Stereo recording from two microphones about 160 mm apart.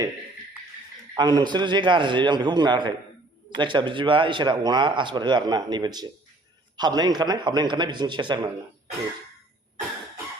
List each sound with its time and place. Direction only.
1.1 s speech: 25° right (ahead or behind)